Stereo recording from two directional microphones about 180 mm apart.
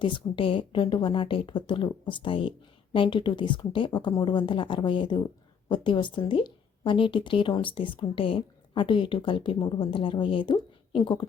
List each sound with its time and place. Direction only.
0.0 s a woman's voice: 30° left (ahead or behind)